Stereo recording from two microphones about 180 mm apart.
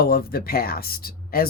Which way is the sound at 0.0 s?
55° left (ahead or behind).